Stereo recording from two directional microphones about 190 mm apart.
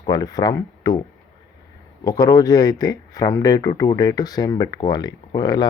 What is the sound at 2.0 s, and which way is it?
Speech, 20° left (ahead or behind).